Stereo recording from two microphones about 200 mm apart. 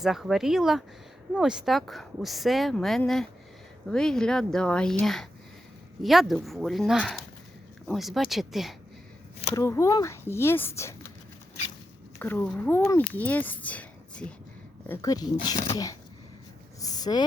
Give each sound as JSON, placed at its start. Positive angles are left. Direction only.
{"t": 0.0, "sound": "speech", "side_deg": 0}
{"t": 9.6, "sound": "speech", "side_deg": 15}
{"t": 12.2, "sound": "speech", "side_deg": 10}
{"t": 14.8, "sound": "speech", "side_deg": 20}
{"t": 16.8, "sound": "a sound", "side_deg": 20}